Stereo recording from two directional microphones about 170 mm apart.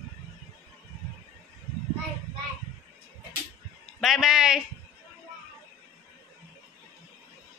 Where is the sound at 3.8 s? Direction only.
Centre (ahead or behind).